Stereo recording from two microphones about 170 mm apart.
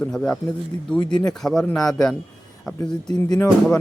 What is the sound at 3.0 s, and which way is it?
Speech, 20° left (ahead or behind).